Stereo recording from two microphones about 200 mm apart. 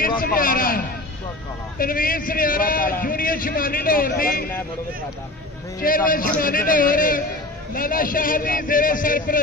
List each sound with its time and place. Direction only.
0.2 s a man's voice: 45° left (ahead or behind)
5.8 s a man's voice: 45° left (ahead or behind)